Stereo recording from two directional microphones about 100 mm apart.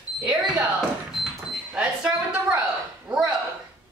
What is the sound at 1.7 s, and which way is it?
Speech, 10° right (ahead or behind).